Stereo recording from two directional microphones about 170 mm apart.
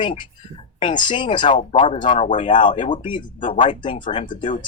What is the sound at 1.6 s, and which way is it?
Speech, 40° left (ahead or behind).